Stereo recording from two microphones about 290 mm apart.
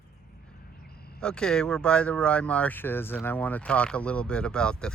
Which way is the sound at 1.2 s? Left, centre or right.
Centre.